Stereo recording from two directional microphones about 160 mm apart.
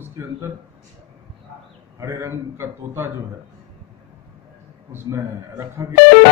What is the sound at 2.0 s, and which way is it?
Speech, 20° right (ahead or behind).